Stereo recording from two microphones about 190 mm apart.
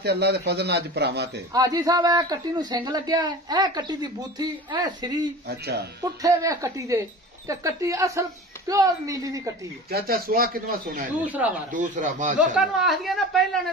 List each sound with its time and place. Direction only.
0.0 s a man's voice: 60° right (ahead or behind)
1.5 s a man's voice: 20° right (ahead or behind)
6.2 s speech: 15° right (ahead or behind)
9.8 s speech: 55° right (ahead or behind)
11.2 s speech: 10° right (ahead or behind)
11.7 s speech: 40° right (ahead or behind)
12.5 s a woman's voice: centre (ahead or behind)